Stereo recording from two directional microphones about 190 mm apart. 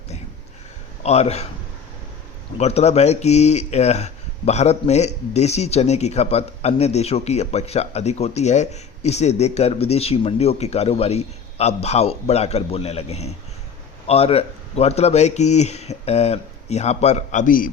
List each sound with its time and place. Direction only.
1.0 s speech: 35° left (ahead or behind)
2.6 s speech: 35° left (ahead or behind)